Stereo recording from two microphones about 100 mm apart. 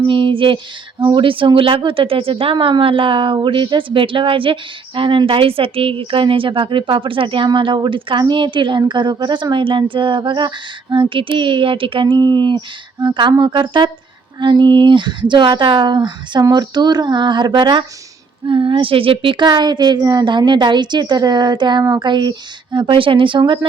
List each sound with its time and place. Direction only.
0.0 s a woman's voice: 55° right (ahead or behind)